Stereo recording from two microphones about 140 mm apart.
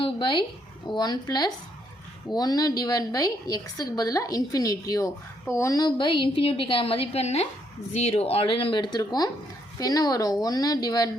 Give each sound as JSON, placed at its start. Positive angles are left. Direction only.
{"t": 0.0, "sound": "a woman's voice", "side_deg": 35}